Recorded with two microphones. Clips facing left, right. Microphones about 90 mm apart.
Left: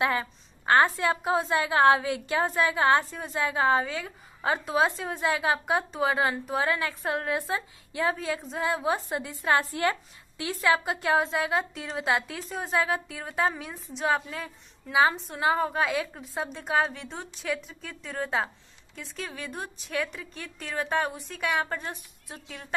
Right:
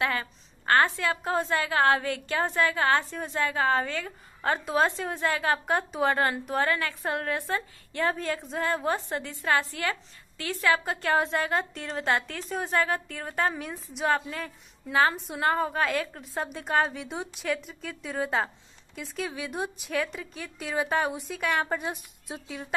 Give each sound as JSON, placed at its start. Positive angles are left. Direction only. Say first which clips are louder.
{"t": 0.0, "sound": "a sound", "louder": "left 2 dB", "side_deg": 15}
{"t": 0.9, "sound": "a woman's voice", "louder": "left 2 dB", "side_deg": 15}
{"t": 1.5, "sound": "a woman's voice", "louder": "left 3 dB", "side_deg": 20}
{"t": 3.0, "sound": "a woman's voice", "louder": "even", "side_deg": 0}
{"t": 3.3, "sound": "a woman's voice", "louder": "left 1 dB", "side_deg": 15}
{"t": 5.3, "sound": "a woman's voice", "louder": "left 1 dB", "side_deg": 10}
{"t": 6.6, "sound": "a woman's voice", "louder": "right 1 dB", "side_deg": 10}
{"t": 7.2, "sound": "a woman's voice", "louder": "left 1 dB", "side_deg": 15}
{"t": 19.9, "sound": "a woman's voice", "louder": "left 2 dB", "side_deg": 0}
{"t": 21.6, "sound": "a woman's voice", "louder": "right 3 dB", "side_deg": -15}